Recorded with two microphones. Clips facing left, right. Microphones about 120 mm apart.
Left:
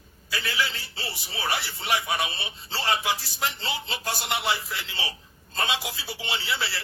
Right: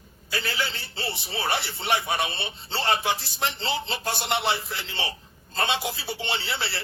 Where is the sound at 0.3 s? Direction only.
30° right (ahead or behind).